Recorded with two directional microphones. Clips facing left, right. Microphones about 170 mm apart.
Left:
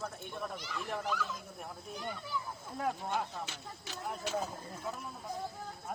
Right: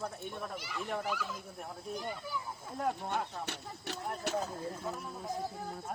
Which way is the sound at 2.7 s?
Centre (ahead or behind).